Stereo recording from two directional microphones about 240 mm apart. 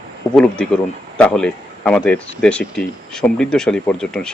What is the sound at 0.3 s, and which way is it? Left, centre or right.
Speech, centre.